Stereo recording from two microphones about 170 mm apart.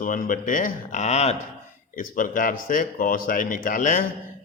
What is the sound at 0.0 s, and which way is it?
A man's voice, 55° left (ahead or behind).